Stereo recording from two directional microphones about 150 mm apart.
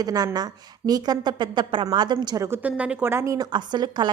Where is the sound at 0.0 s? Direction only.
25° right (ahead or behind).